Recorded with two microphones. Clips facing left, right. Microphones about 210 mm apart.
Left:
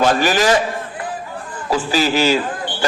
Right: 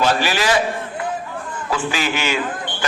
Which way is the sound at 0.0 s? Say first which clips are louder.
Left 4 dB; 45° left (ahead or behind).